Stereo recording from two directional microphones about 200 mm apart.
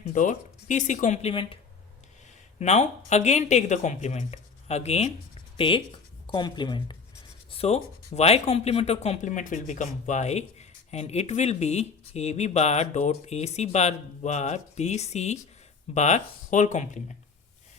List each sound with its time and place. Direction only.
0.1 s speech: 40° left (ahead or behind)
2.6 s speech: 35° left (ahead or behind)